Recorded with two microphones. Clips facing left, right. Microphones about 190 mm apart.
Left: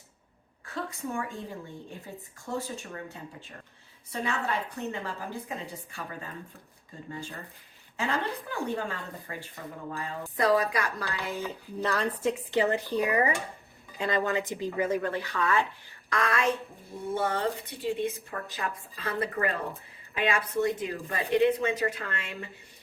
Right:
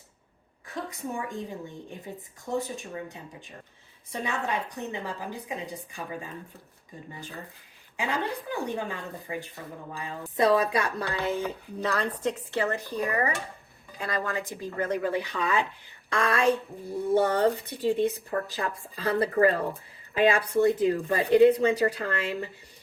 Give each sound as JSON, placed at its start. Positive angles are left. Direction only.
{"t": 0.6, "sound": "a woman's voice", "side_deg": -20}
{"t": 2.5, "sound": "a woman's voice", "side_deg": -20}
{"t": 4.2, "sound": "a woman's voice", "side_deg": -15}
{"t": 7.9, "sound": "a woman's voice", "side_deg": -15}
{"t": 11.8, "sound": "a woman's voice", "side_deg": 0}
{"t": 12.5, "sound": "speech", "side_deg": 20}
{"t": 15.0, "sound": "a woman's voice", "side_deg": -15}
{"t": 16.0, "sound": "speech", "side_deg": -30}